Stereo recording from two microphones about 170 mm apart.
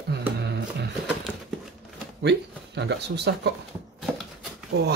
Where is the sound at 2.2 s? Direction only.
90° right.